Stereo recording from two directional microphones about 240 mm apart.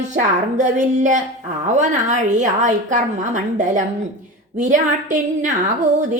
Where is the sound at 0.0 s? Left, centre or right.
Right.